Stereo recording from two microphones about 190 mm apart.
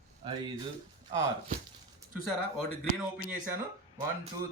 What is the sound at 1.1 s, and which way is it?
Speech, 15° right (ahead or behind).